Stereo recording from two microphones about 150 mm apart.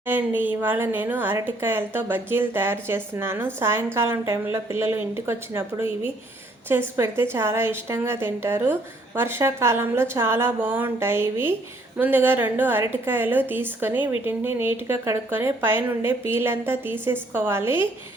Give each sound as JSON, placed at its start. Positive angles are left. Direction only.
{"t": 0.0, "sound": "a woman's voice", "side_deg": -10}